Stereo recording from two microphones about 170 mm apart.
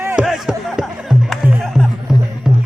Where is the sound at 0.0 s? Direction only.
15° right (ahead or behind).